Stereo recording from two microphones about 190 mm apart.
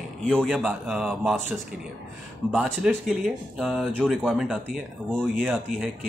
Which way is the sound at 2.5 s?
5° right (ahead or behind).